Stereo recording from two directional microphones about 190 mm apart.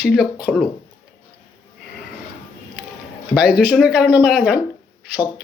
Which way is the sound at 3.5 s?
55° left (ahead or behind).